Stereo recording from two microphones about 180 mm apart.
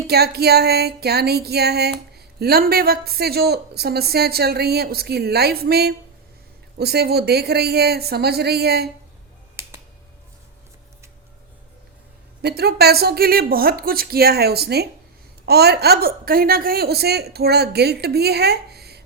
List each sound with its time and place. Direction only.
0.1 s music: 60° right (ahead or behind)
9.6 s finger snapping: 15° right (ahead or behind)
12.4 s music: 65° right (ahead or behind)